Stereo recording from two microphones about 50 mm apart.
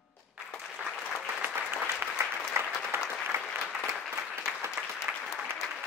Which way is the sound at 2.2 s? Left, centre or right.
Right.